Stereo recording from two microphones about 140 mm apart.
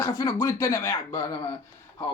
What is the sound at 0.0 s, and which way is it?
Speech, 25° left (ahead or behind).